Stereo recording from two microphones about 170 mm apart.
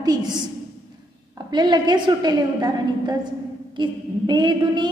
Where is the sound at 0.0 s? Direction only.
25° right (ahead or behind).